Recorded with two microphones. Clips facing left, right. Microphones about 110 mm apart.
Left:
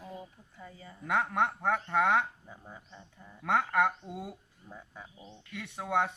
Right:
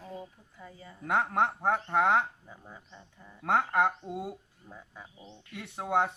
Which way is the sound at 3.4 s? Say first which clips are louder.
Right 1 dB; 25° right (ahead or behind).